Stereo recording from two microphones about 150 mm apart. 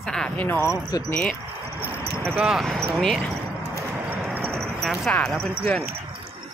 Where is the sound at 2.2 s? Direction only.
10° right (ahead or behind).